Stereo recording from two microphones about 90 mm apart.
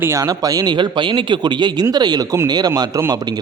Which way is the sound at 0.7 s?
60° right (ahead or behind).